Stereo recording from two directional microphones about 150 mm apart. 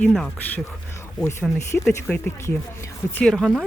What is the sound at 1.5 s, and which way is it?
Speech, 20° left (ahead or behind).